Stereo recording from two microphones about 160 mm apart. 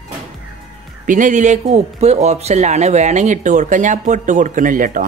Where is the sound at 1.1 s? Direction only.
55° right (ahead or behind).